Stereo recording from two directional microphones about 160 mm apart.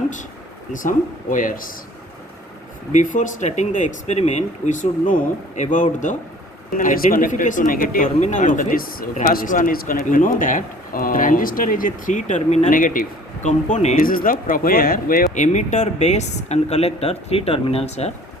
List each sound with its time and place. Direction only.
0.7 s speech: 55° left (ahead or behind)
2.9 s speech: 50° left (ahead or behind)
12.7 s speech: 60° left (ahead or behind)
14.0 s speech: 60° left (ahead or behind)
15.5 s speech: 45° left (ahead or behind)